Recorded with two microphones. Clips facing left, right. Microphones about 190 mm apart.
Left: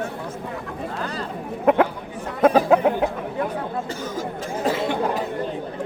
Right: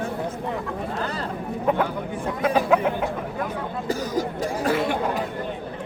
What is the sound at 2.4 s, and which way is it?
Music, 40° left (ahead or behind).